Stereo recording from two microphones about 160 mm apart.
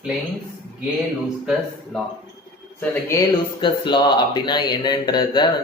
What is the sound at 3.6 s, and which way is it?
Speech, 30° left (ahead or behind).